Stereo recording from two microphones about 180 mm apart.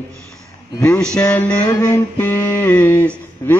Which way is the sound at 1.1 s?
10° left (ahead or behind).